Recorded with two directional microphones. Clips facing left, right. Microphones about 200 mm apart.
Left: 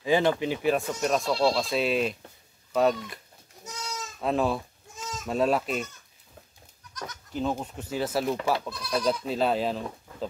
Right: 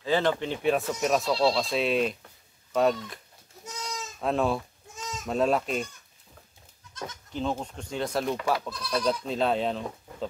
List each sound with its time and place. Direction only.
0.0 s speech: 15° left (ahead or behind)
4.2 s speech: centre (ahead or behind)
6.9 s goat: 25° right (ahead or behind)
7.3 s speech: 5° left (ahead or behind)